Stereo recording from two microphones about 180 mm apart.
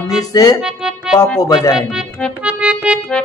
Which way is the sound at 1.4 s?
20° left (ahead or behind).